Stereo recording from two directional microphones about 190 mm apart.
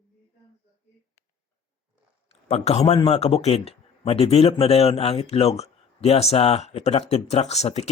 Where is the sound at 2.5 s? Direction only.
30° left (ahead or behind).